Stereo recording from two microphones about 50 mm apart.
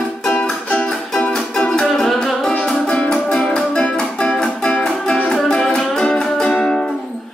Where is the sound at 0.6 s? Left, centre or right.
Left.